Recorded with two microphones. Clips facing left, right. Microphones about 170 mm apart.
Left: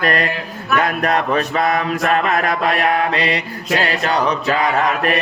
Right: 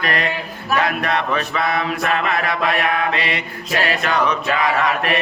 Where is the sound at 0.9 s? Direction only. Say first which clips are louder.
Left 3 dB; 40° left (ahead or behind).